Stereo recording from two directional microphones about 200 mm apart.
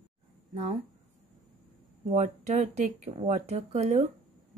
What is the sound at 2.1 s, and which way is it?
Speech, 35° right (ahead or behind).